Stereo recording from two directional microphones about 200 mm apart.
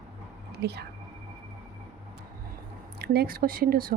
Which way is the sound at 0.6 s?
55° right (ahead or behind).